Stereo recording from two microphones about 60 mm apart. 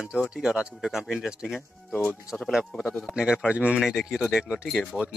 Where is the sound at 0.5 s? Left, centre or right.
Centre.